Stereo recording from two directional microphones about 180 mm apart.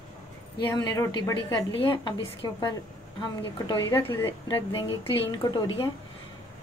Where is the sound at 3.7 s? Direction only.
20° left (ahead or behind).